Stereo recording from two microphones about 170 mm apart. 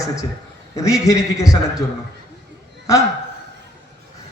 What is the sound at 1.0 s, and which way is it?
Speech, 20° left (ahead or behind).